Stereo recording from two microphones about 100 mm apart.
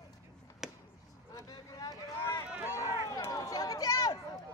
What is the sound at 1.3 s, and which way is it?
Vehicle, 40° left (ahead or behind).